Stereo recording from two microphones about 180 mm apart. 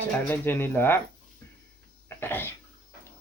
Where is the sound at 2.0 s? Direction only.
10° left (ahead or behind).